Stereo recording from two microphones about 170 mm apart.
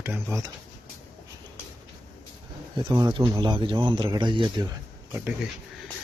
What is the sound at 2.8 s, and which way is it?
A man's voice, 25° right (ahead or behind).